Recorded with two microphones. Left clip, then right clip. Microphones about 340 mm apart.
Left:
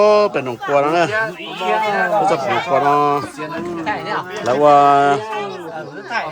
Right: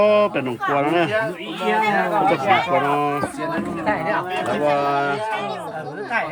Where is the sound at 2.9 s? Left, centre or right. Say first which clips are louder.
Left 6 dB; centre.